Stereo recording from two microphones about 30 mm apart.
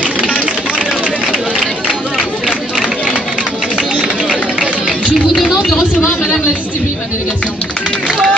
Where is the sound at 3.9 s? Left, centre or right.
Right.